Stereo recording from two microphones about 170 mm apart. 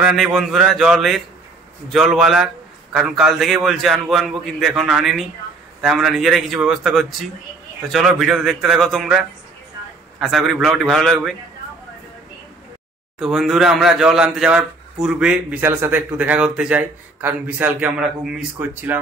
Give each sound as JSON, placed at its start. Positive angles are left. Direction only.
{"t": 0.0, "sound": "a man's voice", "side_deg": 0}
{"t": 13.2, "sound": "a man's voice", "side_deg": 0}